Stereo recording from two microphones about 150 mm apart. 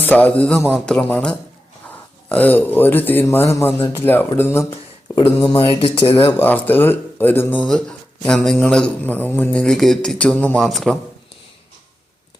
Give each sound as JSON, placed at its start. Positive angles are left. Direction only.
{"t": 0.0, "sound": "speech", "side_deg": 10}
{"t": 5.1, "sound": "speech", "side_deg": 35}
{"t": 6.2, "sound": "speech", "side_deg": 10}